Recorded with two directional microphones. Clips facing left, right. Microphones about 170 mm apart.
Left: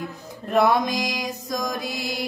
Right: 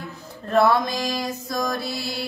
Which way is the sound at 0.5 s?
15° left (ahead or behind).